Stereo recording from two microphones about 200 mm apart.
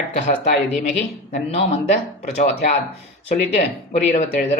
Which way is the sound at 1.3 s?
30° left (ahead or behind).